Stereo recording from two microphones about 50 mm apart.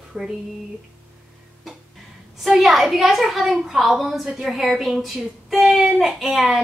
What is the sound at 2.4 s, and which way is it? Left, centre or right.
Speech, centre.